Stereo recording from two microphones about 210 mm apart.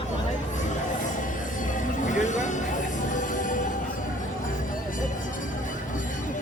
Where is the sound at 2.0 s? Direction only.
35° left (ahead or behind).